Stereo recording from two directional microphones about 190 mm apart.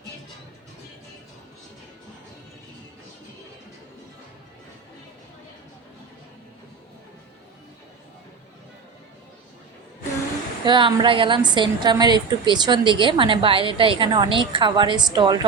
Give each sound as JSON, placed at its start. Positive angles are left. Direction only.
{"t": 10.7, "sound": "a woman's voice", "side_deg": -25}